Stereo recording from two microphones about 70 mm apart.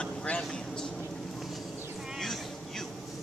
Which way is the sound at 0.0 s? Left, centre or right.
Centre.